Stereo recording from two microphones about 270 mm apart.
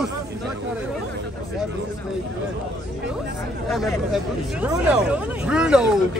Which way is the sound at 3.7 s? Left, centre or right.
Centre.